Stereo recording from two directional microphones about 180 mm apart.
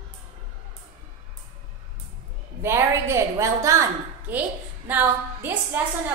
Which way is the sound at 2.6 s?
15° right (ahead or behind).